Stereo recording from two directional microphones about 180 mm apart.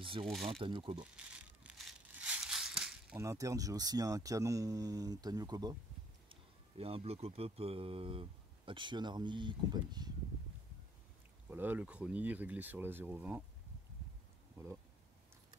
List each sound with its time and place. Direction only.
0.2 s speech: centre (ahead or behind)
0.5 s speech: 30° right (ahead or behind)
1.1 s crushing: 5° right (ahead or behind)
3.2 s speech: 15° right (ahead or behind)
6.8 s speech: 35° right (ahead or behind)
11.4 s speech: 10° right (ahead or behind)